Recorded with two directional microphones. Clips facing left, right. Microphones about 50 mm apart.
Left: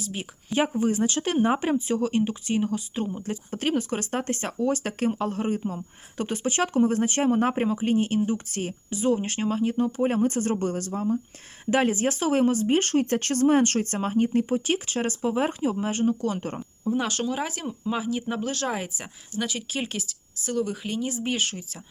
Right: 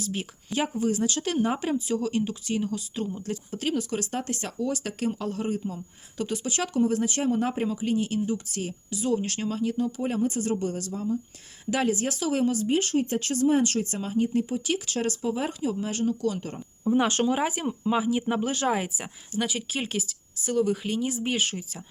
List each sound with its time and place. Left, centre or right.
0.0 s a woman's voice: centre
0.5 s speech: left
3.5 s speech: left
14.8 s speech: left
17.1 s speech: right
17.3 s a woman's voice: centre